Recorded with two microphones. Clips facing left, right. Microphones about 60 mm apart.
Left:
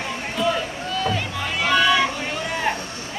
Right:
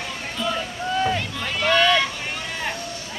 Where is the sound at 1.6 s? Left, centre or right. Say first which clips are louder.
Even; centre.